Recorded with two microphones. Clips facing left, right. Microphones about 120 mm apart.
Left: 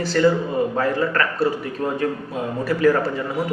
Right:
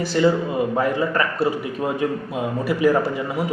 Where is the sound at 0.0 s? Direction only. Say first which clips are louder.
Even; 15° right (ahead or behind).